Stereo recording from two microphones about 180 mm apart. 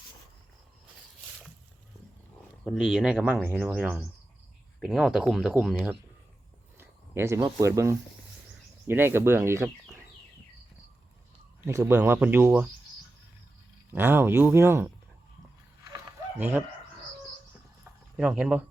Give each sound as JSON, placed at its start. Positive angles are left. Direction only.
{"t": 2.6, "sound": "speech", "side_deg": 0}
{"t": 11.6, "sound": "speech", "side_deg": -15}
{"t": 13.9, "sound": "speech", "side_deg": -10}
{"t": 16.4, "sound": "speech", "side_deg": -10}
{"t": 17.8, "sound": "a sound", "side_deg": -5}